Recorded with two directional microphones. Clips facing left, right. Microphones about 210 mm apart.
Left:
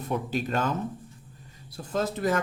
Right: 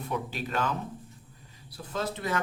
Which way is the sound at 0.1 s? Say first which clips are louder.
Left 5 dB; 45° left (ahead or behind).